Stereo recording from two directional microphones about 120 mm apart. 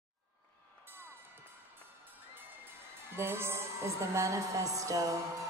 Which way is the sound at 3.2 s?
20° right (ahead or behind).